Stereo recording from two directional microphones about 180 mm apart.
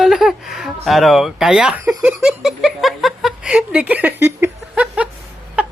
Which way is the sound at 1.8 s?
5° right (ahead or behind).